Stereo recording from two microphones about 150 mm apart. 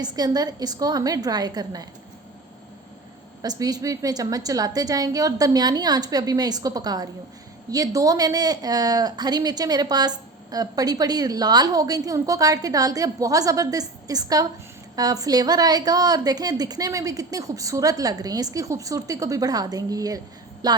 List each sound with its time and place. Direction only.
0.0 s a woman's voice: 25° right (ahead or behind)
3.4 s a woman's voice: 25° right (ahead or behind)